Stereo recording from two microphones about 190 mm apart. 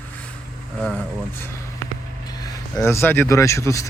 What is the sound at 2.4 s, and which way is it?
Speech, 15° left (ahead or behind).